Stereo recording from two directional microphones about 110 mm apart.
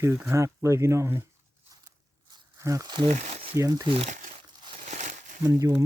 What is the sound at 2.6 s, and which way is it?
Speech, 30° right (ahead or behind).